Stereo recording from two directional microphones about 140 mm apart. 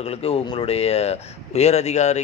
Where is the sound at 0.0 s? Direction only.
45° left (ahead or behind).